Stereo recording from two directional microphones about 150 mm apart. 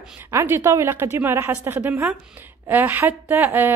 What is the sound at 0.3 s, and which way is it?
Speech, 20° right (ahead or behind).